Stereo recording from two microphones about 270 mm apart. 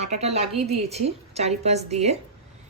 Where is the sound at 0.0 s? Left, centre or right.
Right.